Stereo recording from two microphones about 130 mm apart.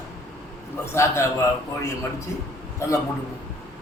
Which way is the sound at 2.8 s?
20° left (ahead or behind).